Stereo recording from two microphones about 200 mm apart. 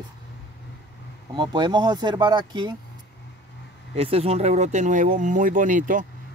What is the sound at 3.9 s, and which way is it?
Speech, 30° right (ahead or behind).